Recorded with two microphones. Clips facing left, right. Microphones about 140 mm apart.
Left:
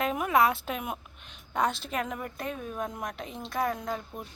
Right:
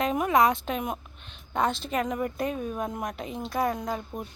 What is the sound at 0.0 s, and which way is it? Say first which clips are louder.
A woman's voice: right 2 dB; centre (ahead or behind).